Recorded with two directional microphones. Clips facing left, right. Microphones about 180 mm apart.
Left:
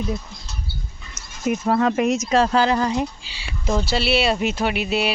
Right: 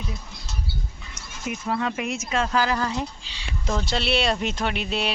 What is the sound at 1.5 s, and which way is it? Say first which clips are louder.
Speech: left 8 dB; 45° left (ahead or behind).